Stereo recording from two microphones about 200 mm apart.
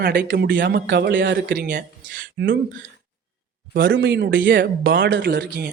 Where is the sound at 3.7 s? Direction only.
50° right (ahead or behind).